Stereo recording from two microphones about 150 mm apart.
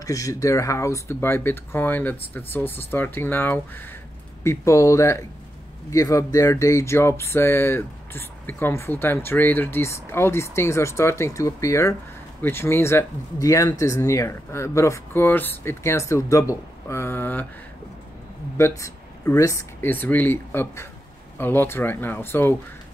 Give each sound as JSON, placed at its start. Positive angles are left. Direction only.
{"t": 0.0, "sound": "speech", "side_deg": 20}
{"t": 18.6, "sound": "speech", "side_deg": 20}